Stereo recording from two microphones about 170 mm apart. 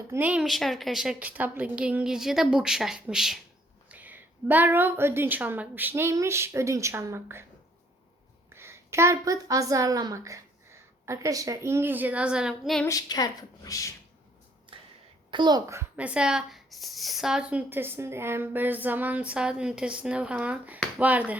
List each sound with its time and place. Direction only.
0.1 s a woman's voice: 10° right (ahead or behind)
8.4 s a woman's voice: 15° right (ahead or behind)
12.8 s a woman's voice: 20° left (ahead or behind)
14.7 s a sound: 30° right (ahead or behind)
15.3 s speech: 25° right (ahead or behind); by 21.3 s 10° right (ahead or behind)